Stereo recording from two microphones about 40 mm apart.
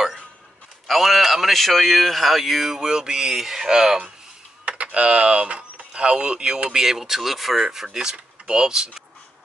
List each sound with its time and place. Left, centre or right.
0.8 s a man's voice: centre
2.8 s speech: centre
4.6 s speech: right
6.7 s speech: centre